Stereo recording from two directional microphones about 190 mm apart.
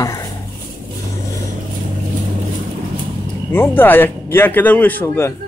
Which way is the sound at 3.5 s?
10° left (ahead or behind).